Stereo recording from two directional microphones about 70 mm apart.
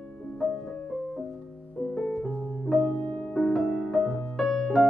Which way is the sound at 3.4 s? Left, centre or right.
Centre.